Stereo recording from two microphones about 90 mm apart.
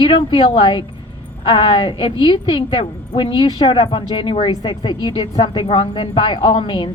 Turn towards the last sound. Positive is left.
turn(degrees=70)  # may be behind; listen again after turning